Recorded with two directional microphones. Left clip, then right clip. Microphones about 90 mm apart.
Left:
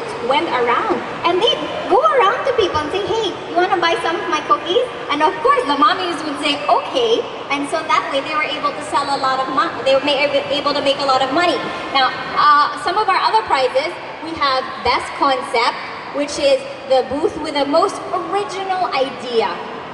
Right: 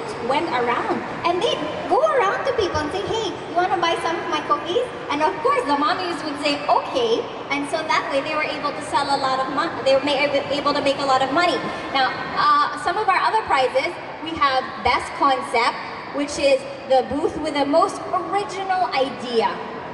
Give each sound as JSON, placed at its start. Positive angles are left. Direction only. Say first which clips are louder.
{"t": 0.3, "sound": "a woman's voice", "louder": "left 5 dB", "side_deg": -15}